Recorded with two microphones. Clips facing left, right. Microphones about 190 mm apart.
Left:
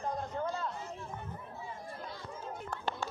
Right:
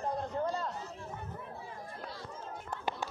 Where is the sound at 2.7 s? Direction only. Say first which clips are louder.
Right 1 dB; 20° right (ahead or behind).